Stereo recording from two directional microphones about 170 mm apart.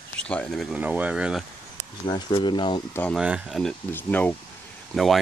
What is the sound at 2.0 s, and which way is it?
Speech, 25° left (ahead or behind).